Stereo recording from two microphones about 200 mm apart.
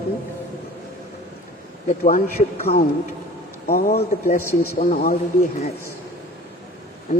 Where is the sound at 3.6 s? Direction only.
50° left (ahead or behind).